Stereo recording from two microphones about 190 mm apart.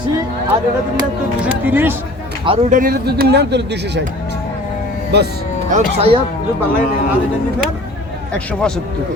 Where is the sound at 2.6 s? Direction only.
45° right (ahead or behind); by 4.0 s 65° right (ahead or behind).